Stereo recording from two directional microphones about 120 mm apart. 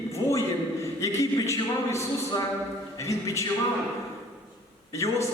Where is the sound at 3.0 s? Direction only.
25° left (ahead or behind).